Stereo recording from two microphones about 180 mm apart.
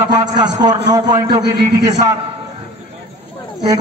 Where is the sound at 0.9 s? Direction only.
20° right (ahead or behind).